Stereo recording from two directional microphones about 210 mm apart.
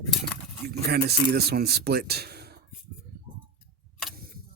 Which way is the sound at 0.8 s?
50° right (ahead or behind).